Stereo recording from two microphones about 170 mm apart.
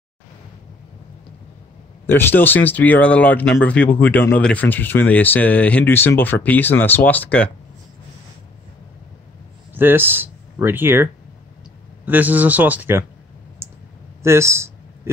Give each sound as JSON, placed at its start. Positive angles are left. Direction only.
{"t": 2.0, "sound": "speech", "side_deg": 15}
{"t": 9.8, "sound": "speech", "side_deg": -10}
{"t": 12.1, "sound": "speech", "side_deg": -10}
{"t": 13.6, "sound": "clicking", "side_deg": -15}
{"t": 14.2, "sound": "speech", "side_deg": -15}